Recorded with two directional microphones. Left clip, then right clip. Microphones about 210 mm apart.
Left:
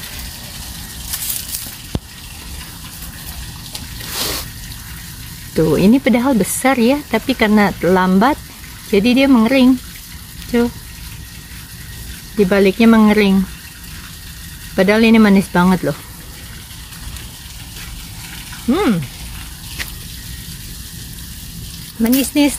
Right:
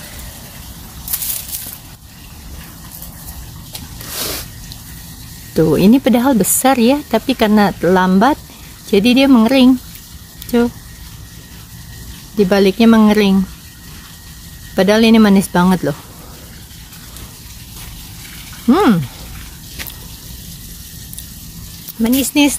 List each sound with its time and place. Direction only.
5.5 s speech: 15° right (ahead or behind)
12.4 s speech: 15° right (ahead or behind)
14.8 s speech: 15° right (ahead or behind)
18.7 s speech: 30° right (ahead or behind)
22.0 s speech: 10° right (ahead or behind)